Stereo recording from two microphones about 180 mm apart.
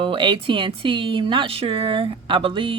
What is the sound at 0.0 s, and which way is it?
Speech, 25° right (ahead or behind).